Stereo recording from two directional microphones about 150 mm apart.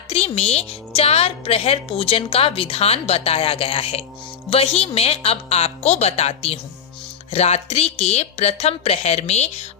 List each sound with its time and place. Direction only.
0.1 s a woman's voice: 45° left (ahead or behind)